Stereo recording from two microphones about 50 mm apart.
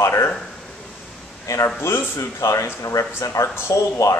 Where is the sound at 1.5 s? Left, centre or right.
Left.